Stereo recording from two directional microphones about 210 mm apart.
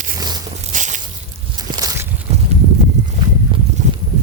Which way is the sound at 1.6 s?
20° right (ahead or behind).